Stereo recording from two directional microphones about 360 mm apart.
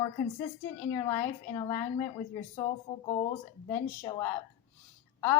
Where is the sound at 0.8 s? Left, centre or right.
Centre.